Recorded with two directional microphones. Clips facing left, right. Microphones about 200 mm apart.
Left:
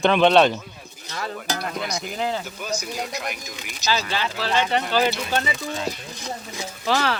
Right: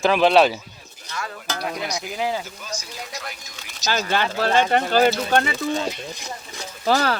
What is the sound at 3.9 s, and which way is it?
Speech, 55° right (ahead or behind).